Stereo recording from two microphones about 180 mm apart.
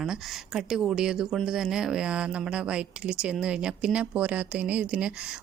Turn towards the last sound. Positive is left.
turn(degrees=-5)  # may be behind; listen again after turning